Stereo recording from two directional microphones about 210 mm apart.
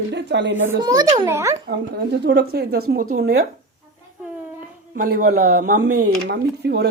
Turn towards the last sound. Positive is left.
turn(degrees=-50)  # may be behind; listen again after turning